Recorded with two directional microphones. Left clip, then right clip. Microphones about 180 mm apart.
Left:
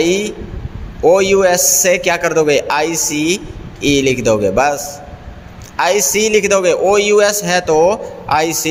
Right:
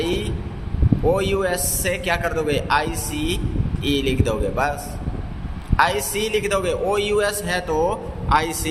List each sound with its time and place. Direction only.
0.0 s a man's voice: 35° left (ahead or behind)